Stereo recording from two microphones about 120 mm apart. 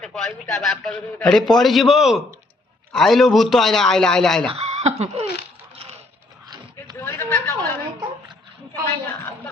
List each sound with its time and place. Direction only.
0.0 s a man's voice: centre (ahead or behind)
4.4 s speech: 60° right (ahead or behind)
6.9 s a sound: 20° left (ahead or behind)